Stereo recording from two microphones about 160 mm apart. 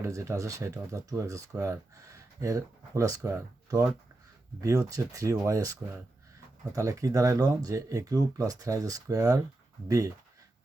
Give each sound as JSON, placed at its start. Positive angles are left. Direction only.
{"t": 0.0, "sound": "speech", "side_deg": -20}
{"t": 6.7, "sound": "speech", "side_deg": -20}